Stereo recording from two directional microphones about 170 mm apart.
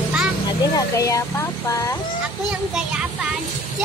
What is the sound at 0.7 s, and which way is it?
Speech, 20° left (ahead or behind).